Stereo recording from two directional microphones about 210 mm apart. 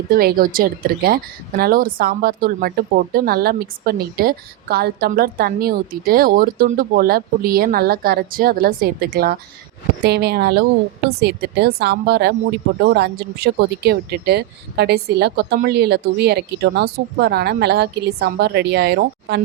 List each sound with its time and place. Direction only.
0.1 s a woman's voice: 45° right (ahead or behind)